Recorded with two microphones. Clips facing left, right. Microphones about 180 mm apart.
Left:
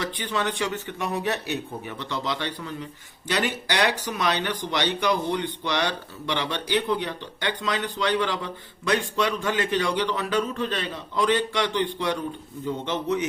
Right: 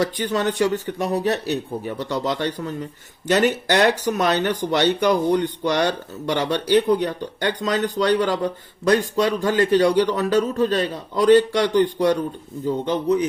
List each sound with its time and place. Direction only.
0.0 s a man's voice: 45° right (ahead or behind)